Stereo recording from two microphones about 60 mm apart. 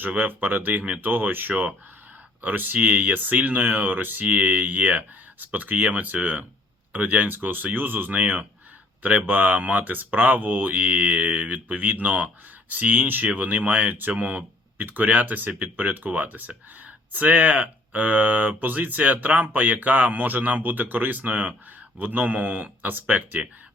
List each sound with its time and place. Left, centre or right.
0.0 s speech: right
14.8 s speech: right